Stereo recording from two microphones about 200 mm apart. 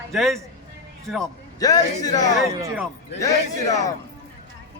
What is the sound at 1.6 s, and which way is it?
Speech, 20° left (ahead or behind).